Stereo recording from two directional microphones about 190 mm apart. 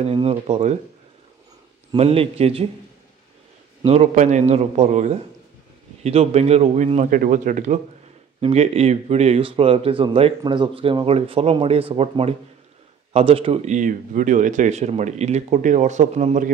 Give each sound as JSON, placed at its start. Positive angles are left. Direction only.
{"t": 0.0, "sound": "speech", "side_deg": -30}
{"t": 1.9, "sound": "speech", "side_deg": -30}
{"t": 3.8, "sound": "speech", "side_deg": -35}